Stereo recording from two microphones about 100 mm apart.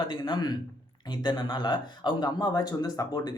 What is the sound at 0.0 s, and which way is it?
Speech, 50° left (ahead or behind).